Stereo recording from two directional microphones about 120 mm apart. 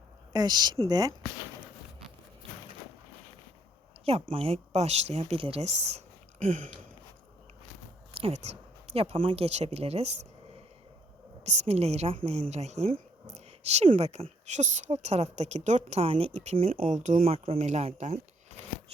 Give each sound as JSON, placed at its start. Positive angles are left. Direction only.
{"t": 0.3, "sound": "speech", "side_deg": -35}
{"t": 4.0, "sound": "speech", "side_deg": -55}
{"t": 6.4, "sound": "a sound", "side_deg": -90}
{"t": 8.2, "sound": "speech", "side_deg": -60}
{"t": 11.4, "sound": "a woman's voice", "side_deg": -60}